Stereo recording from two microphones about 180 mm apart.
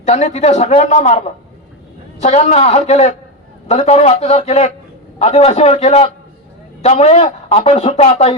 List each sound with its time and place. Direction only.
0.0 s speech: 40° left (ahead or behind)
2.2 s speech: 40° left (ahead or behind)